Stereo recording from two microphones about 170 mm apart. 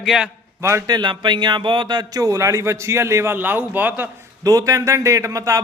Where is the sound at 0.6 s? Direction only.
15° right (ahead or behind).